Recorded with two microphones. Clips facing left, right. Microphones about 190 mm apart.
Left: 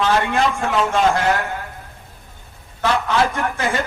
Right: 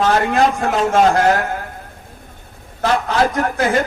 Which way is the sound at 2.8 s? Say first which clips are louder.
Right 2 dB; 40° right (ahead or behind).